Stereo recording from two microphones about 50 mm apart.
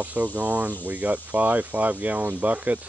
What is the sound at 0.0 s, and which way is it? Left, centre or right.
Speech, right.